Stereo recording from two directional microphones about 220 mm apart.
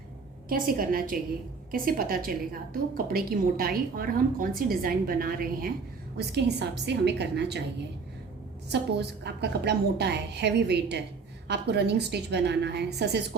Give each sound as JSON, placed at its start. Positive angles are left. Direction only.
{"t": 0.4, "sound": "a woman's voice", "side_deg": -40}